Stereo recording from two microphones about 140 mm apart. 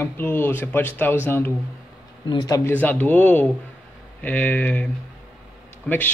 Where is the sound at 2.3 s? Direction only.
30° left (ahead or behind).